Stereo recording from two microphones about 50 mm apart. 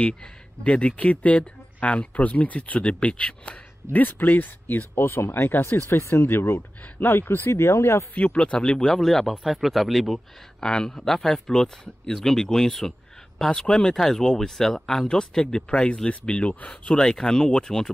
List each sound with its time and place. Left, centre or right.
0.0 s speech: left
3.9 s speech: left
4.9 s speech: left
5.3 s speech: left
5.8 s speech: left
8.1 s speech: left; by 10.2 s centre
10.6 s speech: centre